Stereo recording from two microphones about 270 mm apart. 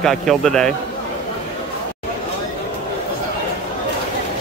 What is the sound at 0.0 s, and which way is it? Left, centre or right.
Speech, centre.